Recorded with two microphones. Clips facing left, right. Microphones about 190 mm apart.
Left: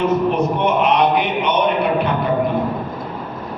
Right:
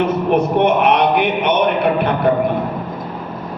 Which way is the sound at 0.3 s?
60° right (ahead or behind).